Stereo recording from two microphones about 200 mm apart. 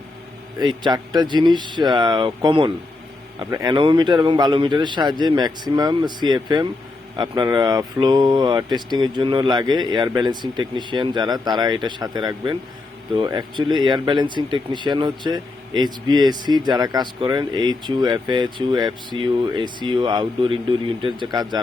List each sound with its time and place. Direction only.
0.9 s speech: 20° right (ahead or behind)